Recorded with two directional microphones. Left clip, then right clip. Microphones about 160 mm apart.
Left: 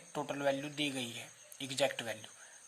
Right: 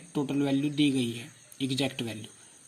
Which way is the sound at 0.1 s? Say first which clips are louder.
Right 5 dB; 10° right (ahead or behind).